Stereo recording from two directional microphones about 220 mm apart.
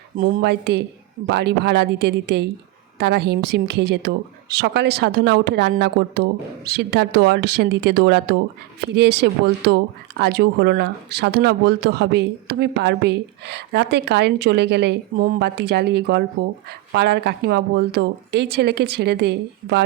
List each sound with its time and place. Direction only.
0.2 s speech: 40° right (ahead or behind)